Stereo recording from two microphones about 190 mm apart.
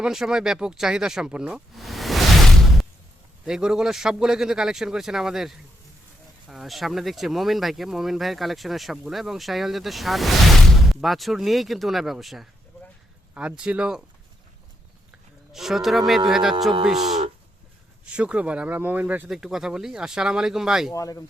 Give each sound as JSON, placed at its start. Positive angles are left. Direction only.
{"t": 0.0, "sound": "speech", "side_deg": -5}
{"t": 3.4, "sound": "speech", "side_deg": -5}
{"t": 15.5, "sound": "speech", "side_deg": 0}
{"t": 20.9, "sound": "speech", "side_deg": 15}